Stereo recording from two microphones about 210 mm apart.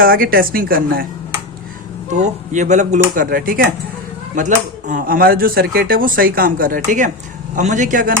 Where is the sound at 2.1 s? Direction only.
35° right (ahead or behind).